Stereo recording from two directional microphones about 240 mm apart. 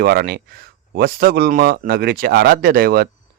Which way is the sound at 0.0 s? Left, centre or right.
Right.